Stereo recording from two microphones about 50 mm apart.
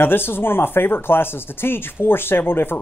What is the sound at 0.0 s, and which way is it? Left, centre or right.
Speech, left.